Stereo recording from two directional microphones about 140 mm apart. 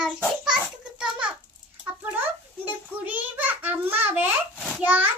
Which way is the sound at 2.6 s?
10° right (ahead or behind).